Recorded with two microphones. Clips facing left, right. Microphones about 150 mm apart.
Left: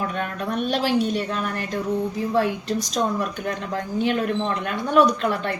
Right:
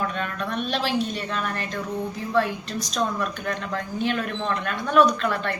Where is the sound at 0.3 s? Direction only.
40° left (ahead or behind).